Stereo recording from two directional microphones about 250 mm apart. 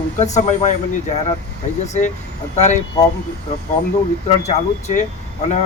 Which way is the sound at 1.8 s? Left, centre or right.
Left.